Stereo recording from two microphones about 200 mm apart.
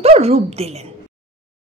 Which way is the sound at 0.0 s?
30° right (ahead or behind).